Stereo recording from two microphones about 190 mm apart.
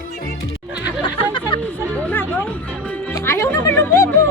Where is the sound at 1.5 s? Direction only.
25° left (ahead or behind).